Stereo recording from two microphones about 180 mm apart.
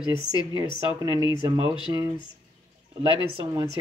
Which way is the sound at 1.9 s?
20° right (ahead or behind).